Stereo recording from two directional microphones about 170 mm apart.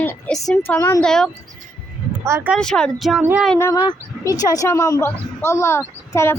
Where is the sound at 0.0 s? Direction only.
10° left (ahead or behind).